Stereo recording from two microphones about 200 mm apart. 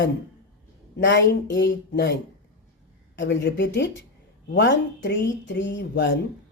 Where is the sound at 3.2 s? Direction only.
60° left (ahead or behind).